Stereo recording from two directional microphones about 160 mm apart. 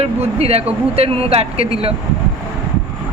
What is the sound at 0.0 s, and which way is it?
Speech, 40° right (ahead or behind).